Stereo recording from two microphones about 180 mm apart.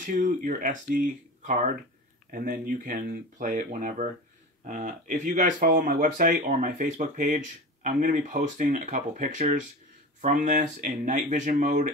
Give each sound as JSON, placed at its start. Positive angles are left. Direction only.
{"t": 0.0, "sound": "speech", "side_deg": -45}